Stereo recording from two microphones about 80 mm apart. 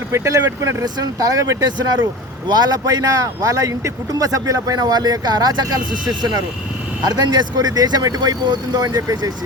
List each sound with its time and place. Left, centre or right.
0.1 s speech: right
7.0 s speech: right